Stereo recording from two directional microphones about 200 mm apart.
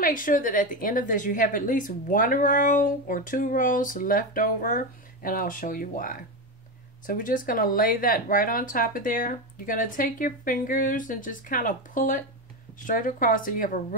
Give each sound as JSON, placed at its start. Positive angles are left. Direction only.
{"t": 0.0, "sound": "a woman's voice", "side_deg": 45}